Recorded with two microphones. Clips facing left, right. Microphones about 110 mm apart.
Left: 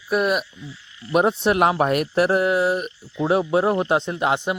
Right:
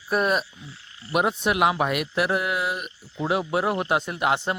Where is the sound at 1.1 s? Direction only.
35° left (ahead or behind).